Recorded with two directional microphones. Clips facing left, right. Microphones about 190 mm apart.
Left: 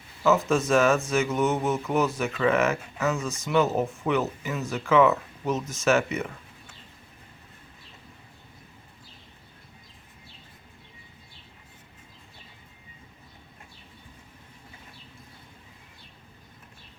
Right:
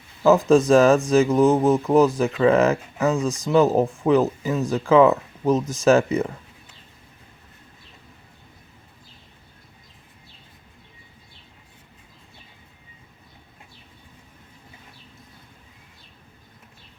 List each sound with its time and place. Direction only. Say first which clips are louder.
0.2 s speech: right 7 dB; 35° right (ahead or behind)